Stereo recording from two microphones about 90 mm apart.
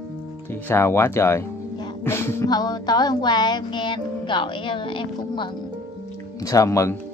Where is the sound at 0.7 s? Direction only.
30° left (ahead or behind).